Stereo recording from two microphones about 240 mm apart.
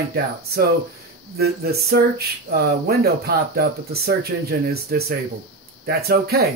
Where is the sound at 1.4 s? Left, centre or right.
Right.